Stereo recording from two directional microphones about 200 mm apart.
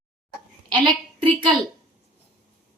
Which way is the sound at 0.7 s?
25° right (ahead or behind).